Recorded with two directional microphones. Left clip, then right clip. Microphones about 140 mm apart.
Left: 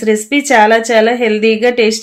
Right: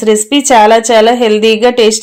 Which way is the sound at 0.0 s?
30° right (ahead or behind).